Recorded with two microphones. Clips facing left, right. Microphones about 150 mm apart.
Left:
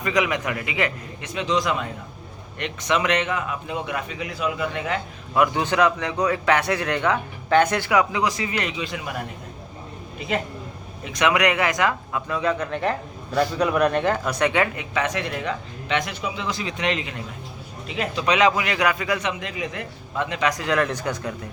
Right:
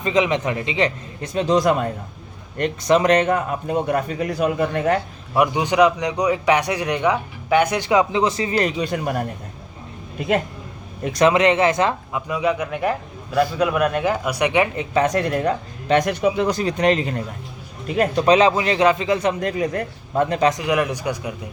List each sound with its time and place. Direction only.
0.0 s a man's voice: 25° right (ahead or behind); by 4.9 s 45° right (ahead or behind)
5.3 s a man's voice: 15° right (ahead or behind)
7.9 s a man's voice: 25° right (ahead or behind); by 10.4 s 50° right (ahead or behind)
11.1 s a man's voice: 30° right (ahead or behind)
12.3 s a man's voice: 10° right (ahead or behind)
14.8 s a man's voice: 35° right (ahead or behind)
18.3 s a man's voice: 30° right (ahead or behind)
19.2 s speech: 40° right (ahead or behind)
20.5 s a man's voice: 15° right (ahead or behind)